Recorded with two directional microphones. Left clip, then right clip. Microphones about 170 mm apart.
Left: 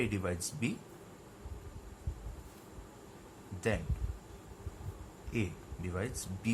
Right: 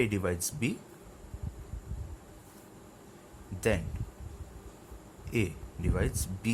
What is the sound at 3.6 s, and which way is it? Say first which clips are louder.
Speech: right 5 dB; 50° right (ahead or behind).